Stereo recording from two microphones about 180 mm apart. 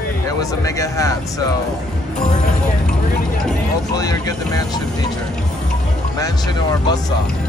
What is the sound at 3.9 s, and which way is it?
Speech, 20° left (ahead or behind).